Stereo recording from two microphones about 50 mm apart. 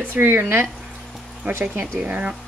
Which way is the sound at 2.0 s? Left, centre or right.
Right.